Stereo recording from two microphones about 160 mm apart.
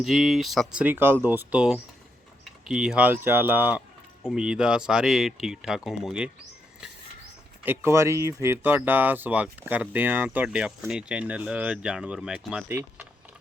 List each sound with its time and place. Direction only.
0.0 s speech: centre (ahead or behind)
7.6 s speech: 15° right (ahead or behind)